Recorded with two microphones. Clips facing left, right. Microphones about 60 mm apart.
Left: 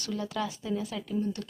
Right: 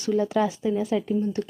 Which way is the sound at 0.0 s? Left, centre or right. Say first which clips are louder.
Right 10 dB; right.